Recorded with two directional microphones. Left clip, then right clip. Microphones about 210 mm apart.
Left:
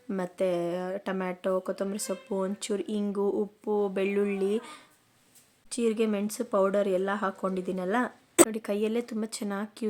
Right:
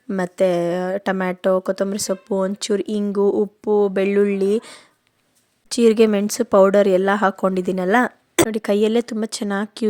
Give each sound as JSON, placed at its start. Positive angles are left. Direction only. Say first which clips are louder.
{"t": 0.1, "sound": "speech", "louder": "right 10 dB", "side_deg": -40}